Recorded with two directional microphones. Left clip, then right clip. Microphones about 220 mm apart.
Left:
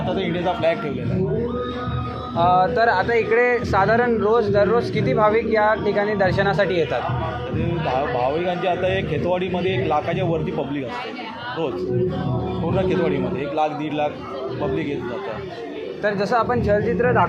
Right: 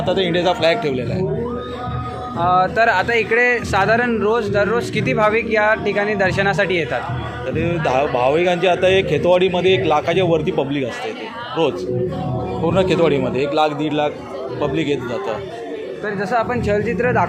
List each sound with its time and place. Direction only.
0.1 s a man's voice: 45° right (ahead or behind)
2.6 s speech: 30° right (ahead or behind)
3.8 s a man's voice: 50° right (ahead or behind)
5.0 s a man's voice: 30° right (ahead or behind)
7.6 s a man's voice: 50° right (ahead or behind)
12.7 s a man's voice: 45° right (ahead or behind)
16.0 s speech: 15° right (ahead or behind); by 17.2 s 35° right (ahead or behind)